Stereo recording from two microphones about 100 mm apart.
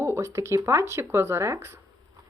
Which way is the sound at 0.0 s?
30° right (ahead or behind).